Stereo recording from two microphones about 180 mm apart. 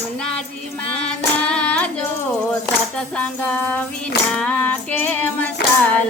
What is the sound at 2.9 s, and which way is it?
Music, 5° left (ahead or behind).